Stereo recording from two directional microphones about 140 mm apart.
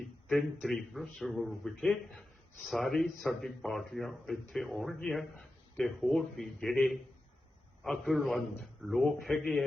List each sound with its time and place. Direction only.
0.3 s a man's voice: centre (ahead or behind)